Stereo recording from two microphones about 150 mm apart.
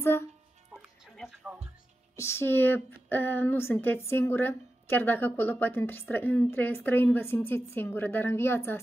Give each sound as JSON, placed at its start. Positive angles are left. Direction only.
{"t": 0.0, "sound": "speech", "side_deg": 15}
{"t": 1.0, "sound": "music", "side_deg": 0}
{"t": 2.1, "sound": "a woman's voice", "side_deg": 15}